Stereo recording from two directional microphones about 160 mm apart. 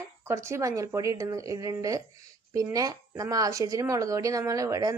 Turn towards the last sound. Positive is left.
turn(degrees=-20)  # may be behind; listen again after turning